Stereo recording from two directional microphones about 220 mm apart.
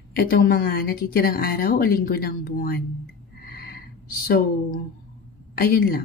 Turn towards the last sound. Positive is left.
turn(degrees=45)  # may be behind; listen again after turning